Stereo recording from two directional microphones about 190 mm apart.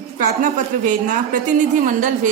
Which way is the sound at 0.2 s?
45° right (ahead or behind).